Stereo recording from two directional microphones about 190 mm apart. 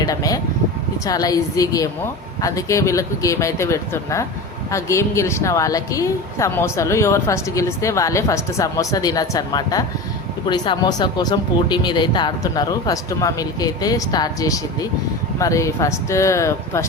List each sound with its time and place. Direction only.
0.0 s a woman's voice: 20° left (ahead or behind)